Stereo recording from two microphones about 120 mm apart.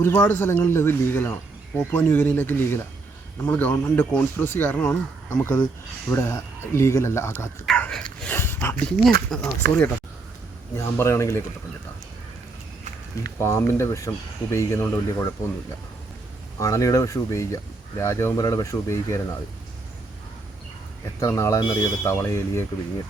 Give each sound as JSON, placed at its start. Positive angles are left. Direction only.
{"t": 0.0, "sound": "speech", "side_deg": 15}
{"t": 7.8, "sound": "dog", "side_deg": 5}
{"t": 8.4, "sound": "speech", "side_deg": 20}
{"t": 9.0, "sound": "speech", "side_deg": 5}
{"t": 10.8, "sound": "speech", "side_deg": 25}
{"t": 13.4, "sound": "speech", "side_deg": 20}
{"t": 16.6, "sound": "speech", "side_deg": 25}
{"t": 21.2, "sound": "speech", "side_deg": 25}